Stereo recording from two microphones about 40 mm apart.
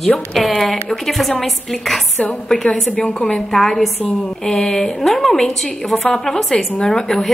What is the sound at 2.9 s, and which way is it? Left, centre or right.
Speech, left.